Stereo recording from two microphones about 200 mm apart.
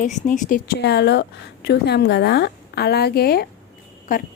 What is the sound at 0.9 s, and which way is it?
A woman's voice, 60° left (ahead or behind).